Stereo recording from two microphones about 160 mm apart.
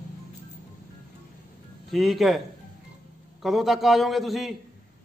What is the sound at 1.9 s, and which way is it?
A man's voice, centre (ahead or behind).